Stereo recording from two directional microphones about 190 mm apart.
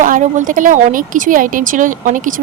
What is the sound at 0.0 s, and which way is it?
A woman's voice, 40° right (ahead or behind).